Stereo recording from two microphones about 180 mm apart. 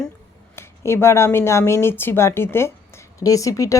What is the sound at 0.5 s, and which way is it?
Speech, 15° left (ahead or behind).